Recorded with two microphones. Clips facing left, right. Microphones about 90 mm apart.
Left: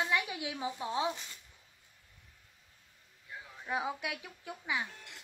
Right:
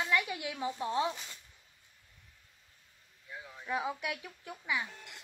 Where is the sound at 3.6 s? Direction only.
20° left (ahead or behind).